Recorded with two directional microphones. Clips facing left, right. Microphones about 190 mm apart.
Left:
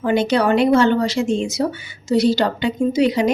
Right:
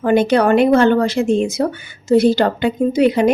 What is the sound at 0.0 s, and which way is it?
Speech, 55° right (ahead or behind).